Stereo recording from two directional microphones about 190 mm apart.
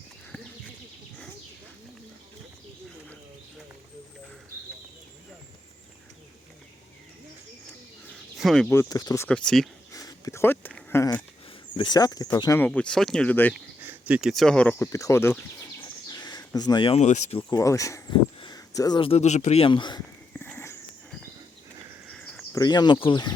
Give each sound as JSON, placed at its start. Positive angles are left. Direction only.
{"t": 8.4, "sound": "speech", "side_deg": 0}
{"t": 8.7, "sound": "speech", "side_deg": 15}
{"t": 9.9, "sound": "a sound", "side_deg": 20}
{"t": 11.8, "sound": "speech", "side_deg": 20}
{"t": 13.8, "sound": "speech", "side_deg": -10}
{"t": 17.5, "sound": "speech", "side_deg": 15}
{"t": 20.4, "sound": "a sound", "side_deg": 10}
{"t": 22.5, "sound": "speech", "side_deg": 20}